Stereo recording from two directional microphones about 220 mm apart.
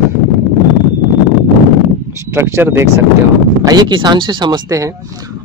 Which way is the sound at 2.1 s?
10° right (ahead or behind).